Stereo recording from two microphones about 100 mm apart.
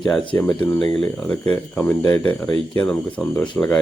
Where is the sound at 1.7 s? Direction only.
25° left (ahead or behind).